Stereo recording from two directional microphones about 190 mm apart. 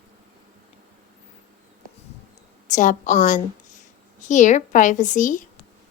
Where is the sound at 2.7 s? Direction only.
40° left (ahead or behind).